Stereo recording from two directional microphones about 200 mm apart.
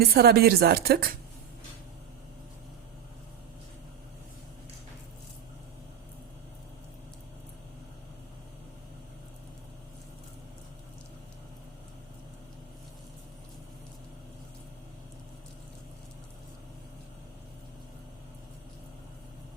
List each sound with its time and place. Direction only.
0.0 s speech: 50° right (ahead or behind)